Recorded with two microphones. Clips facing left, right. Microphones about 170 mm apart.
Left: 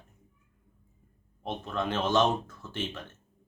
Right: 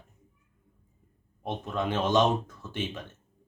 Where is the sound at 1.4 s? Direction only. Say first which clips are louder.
Right 1 dB; 15° right (ahead or behind).